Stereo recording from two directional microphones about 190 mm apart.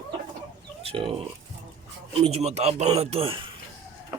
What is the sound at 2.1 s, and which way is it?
Speech, 30° right (ahead or behind).